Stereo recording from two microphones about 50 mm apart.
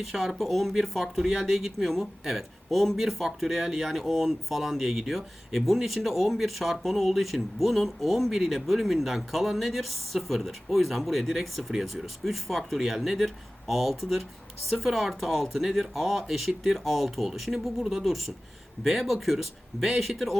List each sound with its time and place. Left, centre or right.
0.0 s speech: centre